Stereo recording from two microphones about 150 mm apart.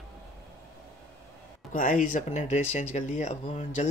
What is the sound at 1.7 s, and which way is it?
Speech, 65° left (ahead or behind).